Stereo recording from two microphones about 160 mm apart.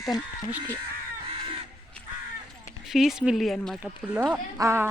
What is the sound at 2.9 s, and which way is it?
Speech, centre (ahead or behind).